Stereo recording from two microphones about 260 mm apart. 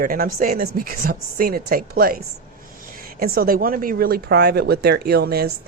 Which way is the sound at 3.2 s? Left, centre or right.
Right.